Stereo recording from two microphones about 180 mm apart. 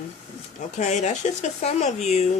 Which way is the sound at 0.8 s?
40° left (ahead or behind).